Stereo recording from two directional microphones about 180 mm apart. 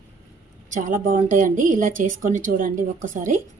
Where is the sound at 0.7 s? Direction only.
45° right (ahead or behind).